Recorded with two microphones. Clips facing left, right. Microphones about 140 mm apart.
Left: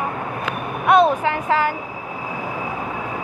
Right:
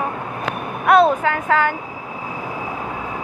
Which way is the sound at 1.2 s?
30° left (ahead or behind).